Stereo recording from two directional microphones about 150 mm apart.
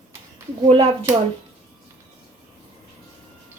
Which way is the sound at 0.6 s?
35° right (ahead or behind).